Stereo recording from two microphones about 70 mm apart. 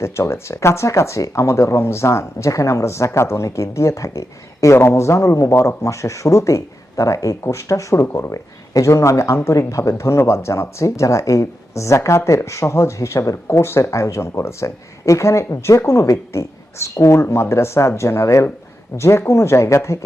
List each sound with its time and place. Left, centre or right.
0.0 s speech: left
8.0 s speech: left
8.3 s speech: left